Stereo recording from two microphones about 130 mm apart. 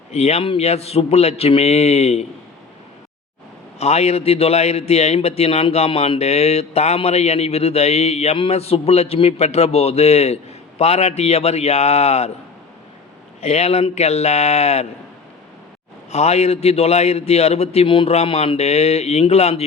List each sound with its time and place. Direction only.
0.1 s a man's voice: 55° left (ahead or behind)
3.8 s a man's voice: 55° left (ahead or behind)
13.4 s a man's voice: 55° left (ahead or behind)
16.0 s a man's voice: 55° left (ahead or behind)